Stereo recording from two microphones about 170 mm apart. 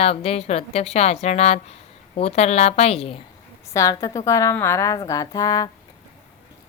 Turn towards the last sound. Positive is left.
turn(degrees=20)  # may be behind; listen again after turning